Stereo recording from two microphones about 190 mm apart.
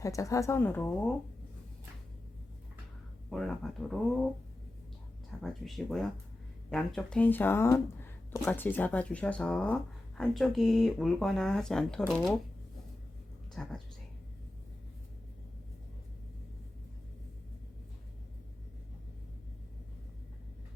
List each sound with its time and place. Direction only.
0.0 s speech: 15° left (ahead or behind)
3.2 s speech: centre (ahead or behind)
5.4 s speech: centre (ahead or behind)
13.6 s speech: centre (ahead or behind)